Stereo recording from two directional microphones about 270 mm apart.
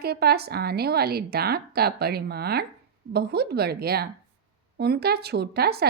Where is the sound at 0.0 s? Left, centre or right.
Right.